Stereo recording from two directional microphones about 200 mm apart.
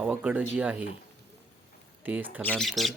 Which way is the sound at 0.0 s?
5° right (ahead or behind).